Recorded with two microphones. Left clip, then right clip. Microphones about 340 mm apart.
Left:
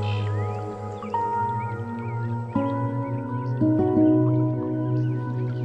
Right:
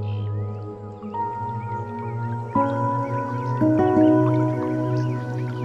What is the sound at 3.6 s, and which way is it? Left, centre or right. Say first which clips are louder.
Music: right 3 dB; right.